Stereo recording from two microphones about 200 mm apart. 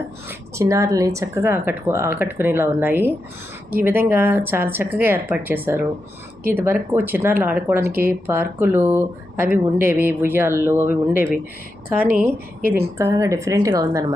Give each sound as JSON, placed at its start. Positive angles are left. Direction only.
{"t": 0.3, "sound": "speech", "side_deg": -15}
{"t": 12.2, "sound": "a woman's voice", "side_deg": -45}
{"t": 13.0, "sound": "speech", "side_deg": -15}